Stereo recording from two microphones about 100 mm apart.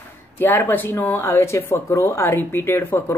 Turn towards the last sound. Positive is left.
turn(degrees=20)  # may be behind; listen again after turning